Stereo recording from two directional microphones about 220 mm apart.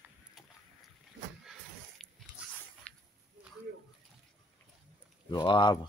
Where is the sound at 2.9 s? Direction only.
5° left (ahead or behind).